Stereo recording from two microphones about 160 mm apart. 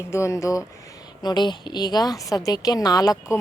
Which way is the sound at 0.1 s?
15° left (ahead or behind).